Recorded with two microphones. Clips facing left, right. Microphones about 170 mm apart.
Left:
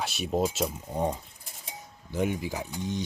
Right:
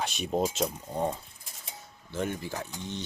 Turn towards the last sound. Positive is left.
turn(degrees=15)  # may be behind; listen again after turning